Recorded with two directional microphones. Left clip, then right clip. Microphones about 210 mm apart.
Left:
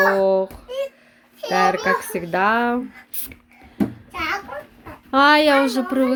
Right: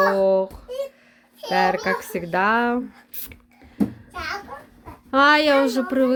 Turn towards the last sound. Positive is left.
turn(degrees=0)  # may be behind; listen again after turning